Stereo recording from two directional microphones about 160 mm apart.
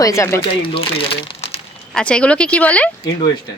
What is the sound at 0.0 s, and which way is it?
Speech, 20° left (ahead or behind).